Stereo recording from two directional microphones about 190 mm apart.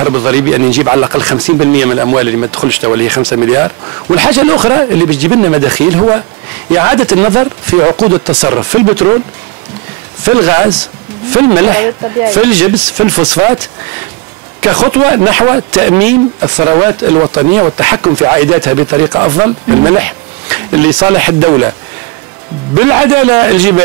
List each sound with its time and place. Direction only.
0.0 s speech: 15° right (ahead or behind)
10.2 s speech: 15° right (ahead or behind)
14.6 s speech: 15° right (ahead or behind)
17.7 s speech: 10° right (ahead or behind)
22.8 s speech: 15° right (ahead or behind)